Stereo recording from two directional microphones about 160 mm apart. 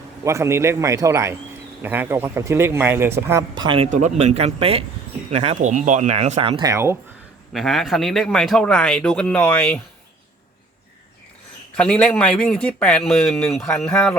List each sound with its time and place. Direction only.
0.3 s speech: 15° right (ahead or behind)
3.5 s speech: 30° right (ahead or behind)
3.8 s speech: 50° right (ahead or behind)
6.6 s speech: 20° right (ahead or behind)
7.5 s a man's voice: centre (ahead or behind)
11.8 s a man's voice: 5° left (ahead or behind)